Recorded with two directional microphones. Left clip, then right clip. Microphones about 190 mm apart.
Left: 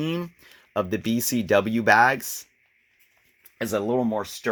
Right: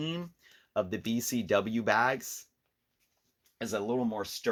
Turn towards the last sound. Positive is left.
turn(degrees=50)  # may be behind; listen again after turning